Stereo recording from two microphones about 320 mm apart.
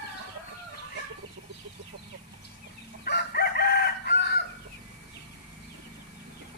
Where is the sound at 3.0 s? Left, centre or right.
Left.